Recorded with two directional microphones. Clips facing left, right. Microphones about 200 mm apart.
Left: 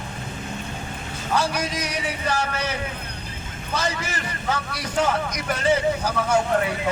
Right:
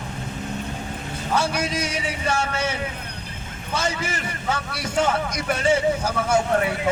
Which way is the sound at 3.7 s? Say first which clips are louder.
Right 1 dB; 25° right (ahead or behind).